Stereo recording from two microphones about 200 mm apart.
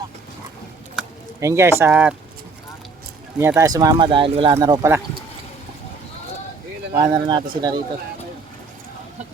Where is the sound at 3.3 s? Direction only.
15° right (ahead or behind).